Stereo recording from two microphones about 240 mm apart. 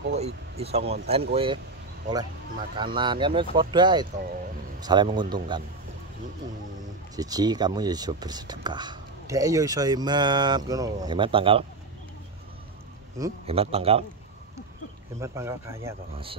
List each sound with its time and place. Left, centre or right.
0.1 s speech: right
2.8 s speech: centre
7.2 s speech: centre
13.2 s speech: centre
13.5 s speech: right
15.1 s speech: centre